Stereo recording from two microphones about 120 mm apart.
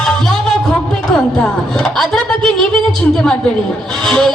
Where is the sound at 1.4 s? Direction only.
5° left (ahead or behind).